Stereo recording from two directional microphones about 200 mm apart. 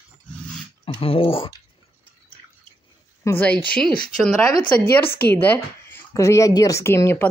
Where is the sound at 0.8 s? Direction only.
30° left (ahead or behind).